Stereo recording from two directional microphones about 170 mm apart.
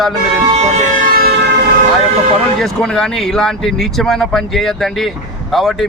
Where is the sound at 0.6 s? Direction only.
50° right (ahead or behind).